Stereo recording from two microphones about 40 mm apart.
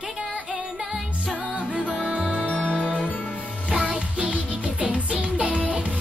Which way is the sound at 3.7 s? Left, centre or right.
Right.